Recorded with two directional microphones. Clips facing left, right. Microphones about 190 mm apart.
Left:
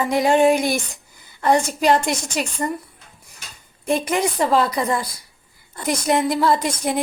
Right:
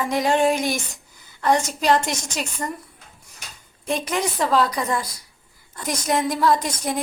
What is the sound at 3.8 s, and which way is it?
Speech, 50° left (ahead or behind).